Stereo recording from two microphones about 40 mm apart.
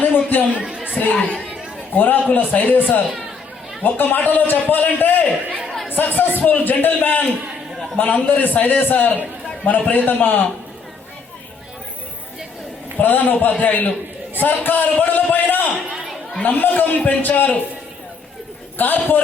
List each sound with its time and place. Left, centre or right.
0.0 s a man's voice: left
13.0 s a man's voice: left
18.8 s a man's voice: left